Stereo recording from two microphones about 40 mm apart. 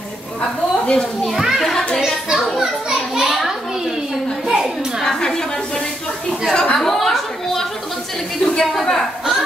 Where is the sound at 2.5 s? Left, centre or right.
Centre.